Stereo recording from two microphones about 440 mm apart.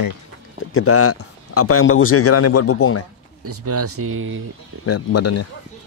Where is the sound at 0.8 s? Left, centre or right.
Left.